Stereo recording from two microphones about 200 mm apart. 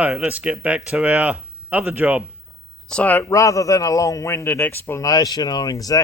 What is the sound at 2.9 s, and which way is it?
A man's voice, 5° left (ahead or behind).